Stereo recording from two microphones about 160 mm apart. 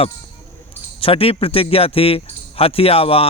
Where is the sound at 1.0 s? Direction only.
35° left (ahead or behind).